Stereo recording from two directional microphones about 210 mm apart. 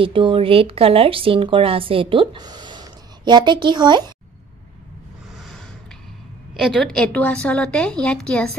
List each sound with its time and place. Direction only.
0.0 s speech: 25° right (ahead or behind)
6.5 s a woman's voice: centre (ahead or behind)